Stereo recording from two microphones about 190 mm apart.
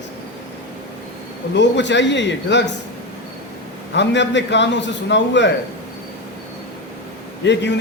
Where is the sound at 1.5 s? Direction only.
70° left (ahead or behind).